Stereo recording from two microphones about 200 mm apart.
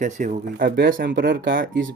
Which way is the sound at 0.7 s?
55° right (ahead or behind).